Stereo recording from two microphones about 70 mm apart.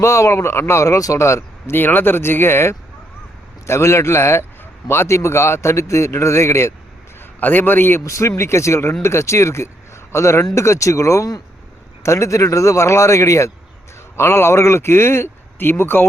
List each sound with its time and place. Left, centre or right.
0.0 s speech: left
1.7 s speech: left
7.2 s a man's voice: left
8.0 s a man's voice: left